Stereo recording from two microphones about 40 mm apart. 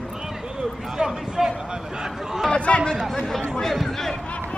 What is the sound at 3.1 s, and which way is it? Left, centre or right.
Chatter, centre.